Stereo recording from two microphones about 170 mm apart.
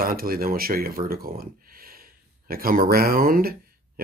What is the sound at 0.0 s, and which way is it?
Speech, 60° right (ahead or behind).